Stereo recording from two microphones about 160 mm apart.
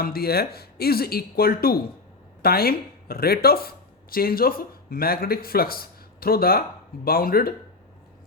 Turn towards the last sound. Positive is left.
turn(degrees=70)  # may be behind; listen again after turning